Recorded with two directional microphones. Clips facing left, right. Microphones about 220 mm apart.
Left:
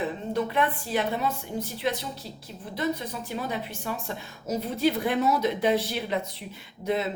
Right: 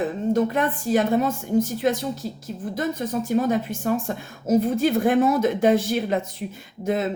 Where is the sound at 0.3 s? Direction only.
45° right (ahead or behind).